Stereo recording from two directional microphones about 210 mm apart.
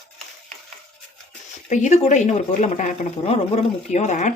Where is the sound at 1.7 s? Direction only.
35° left (ahead or behind).